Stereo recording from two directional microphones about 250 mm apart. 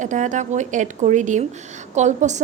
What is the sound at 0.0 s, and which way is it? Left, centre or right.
A woman's voice, right.